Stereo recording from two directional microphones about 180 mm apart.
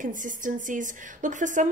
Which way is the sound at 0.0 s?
45° right (ahead or behind).